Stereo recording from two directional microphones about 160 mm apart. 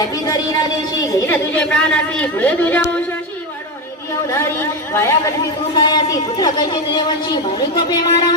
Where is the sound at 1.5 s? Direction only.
5° left (ahead or behind).